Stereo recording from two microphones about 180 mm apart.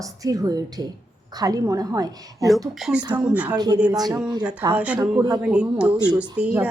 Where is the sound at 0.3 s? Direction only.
20° right (ahead or behind).